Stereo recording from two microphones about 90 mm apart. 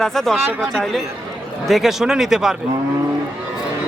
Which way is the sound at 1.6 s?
Centre (ahead or behind).